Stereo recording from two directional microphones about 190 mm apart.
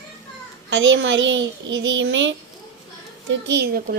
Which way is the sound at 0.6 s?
75° right (ahead or behind).